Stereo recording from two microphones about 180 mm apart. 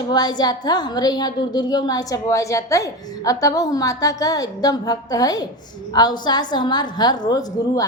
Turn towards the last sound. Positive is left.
turn(degrees=20)  # may be behind; listen again after turning